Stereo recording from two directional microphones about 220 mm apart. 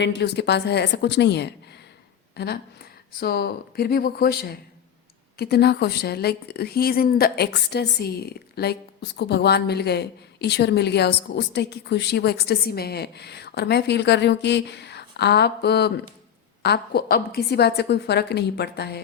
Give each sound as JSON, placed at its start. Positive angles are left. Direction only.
{"t": 0.0, "sound": "a woman's voice", "side_deg": 50}